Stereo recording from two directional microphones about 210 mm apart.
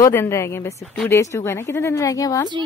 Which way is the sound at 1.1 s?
15° left (ahead or behind).